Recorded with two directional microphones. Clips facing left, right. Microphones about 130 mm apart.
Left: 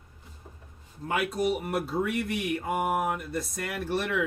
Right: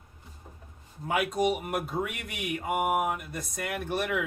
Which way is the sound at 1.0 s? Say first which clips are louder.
Right 1 dB; 5° right (ahead or behind).